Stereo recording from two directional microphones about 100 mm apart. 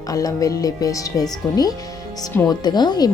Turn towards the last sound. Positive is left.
turn(degrees=45)  # may be behind; listen again after turning